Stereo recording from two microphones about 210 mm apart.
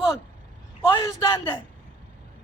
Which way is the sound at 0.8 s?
15° left (ahead or behind).